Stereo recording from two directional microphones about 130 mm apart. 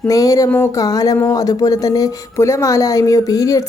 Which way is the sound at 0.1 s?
25° left (ahead or behind).